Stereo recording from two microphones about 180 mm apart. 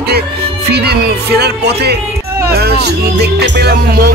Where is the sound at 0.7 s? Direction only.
65° right (ahead or behind).